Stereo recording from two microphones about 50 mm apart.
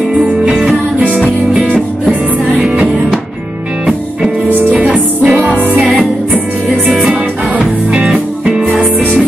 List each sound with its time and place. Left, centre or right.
0.9 s music: right
1.5 s music: centre
4.5 s music: right
6.9 s music: centre